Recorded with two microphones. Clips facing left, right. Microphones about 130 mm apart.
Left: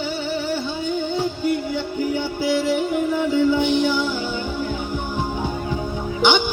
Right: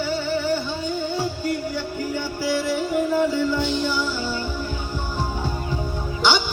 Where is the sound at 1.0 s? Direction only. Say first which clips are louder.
Left 2 dB; 10° right (ahead or behind).